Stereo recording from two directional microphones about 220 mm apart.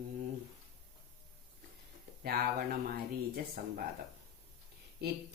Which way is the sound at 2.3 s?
45° right (ahead or behind).